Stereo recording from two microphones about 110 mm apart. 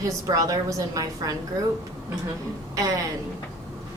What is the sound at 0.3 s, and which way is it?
A woman's voice, 35° right (ahead or behind).